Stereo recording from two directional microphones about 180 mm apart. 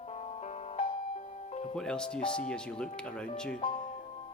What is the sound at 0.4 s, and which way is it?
Music, 35° left (ahead or behind).